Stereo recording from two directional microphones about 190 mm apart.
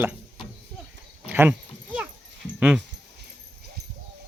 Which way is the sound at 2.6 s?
5° right (ahead or behind).